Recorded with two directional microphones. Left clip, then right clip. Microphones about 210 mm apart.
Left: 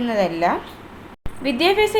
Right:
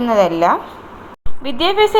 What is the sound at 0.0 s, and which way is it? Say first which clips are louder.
A woman's voice: right 6 dB; 10° right (ahead or behind).